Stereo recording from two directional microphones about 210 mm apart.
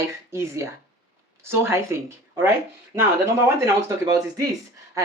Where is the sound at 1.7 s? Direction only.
10° right (ahead or behind).